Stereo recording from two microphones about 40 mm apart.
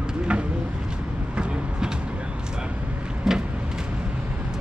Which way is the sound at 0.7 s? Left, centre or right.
Right.